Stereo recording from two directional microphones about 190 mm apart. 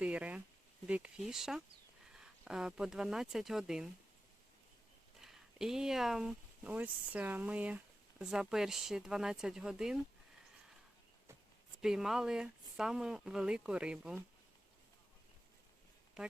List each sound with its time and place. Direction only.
0.0 s a sound: 5° right (ahead or behind)
0.9 s speech: 5° right (ahead or behind)
5.2 s speech: centre (ahead or behind)
11.8 s speech: 5° right (ahead or behind)
16.2 s speech: centre (ahead or behind)